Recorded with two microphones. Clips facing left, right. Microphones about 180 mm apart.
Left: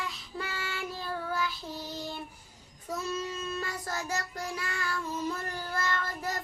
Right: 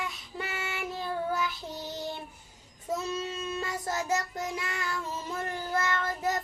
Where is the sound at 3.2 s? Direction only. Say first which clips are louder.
Right 1 dB; 25° right (ahead or behind).